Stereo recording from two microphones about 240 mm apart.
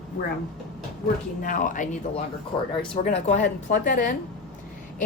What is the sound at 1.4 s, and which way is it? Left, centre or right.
Speech, left.